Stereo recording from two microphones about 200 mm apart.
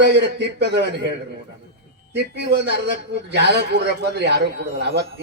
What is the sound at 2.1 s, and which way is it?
A man's voice, 55° right (ahead or behind).